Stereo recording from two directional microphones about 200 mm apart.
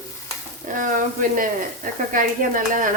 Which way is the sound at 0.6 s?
40° right (ahead or behind).